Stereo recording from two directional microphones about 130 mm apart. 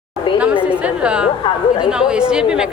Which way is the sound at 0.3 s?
10° right (ahead or behind).